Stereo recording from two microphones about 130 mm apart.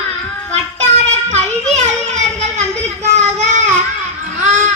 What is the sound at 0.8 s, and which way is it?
Children playing, 60° right (ahead or behind).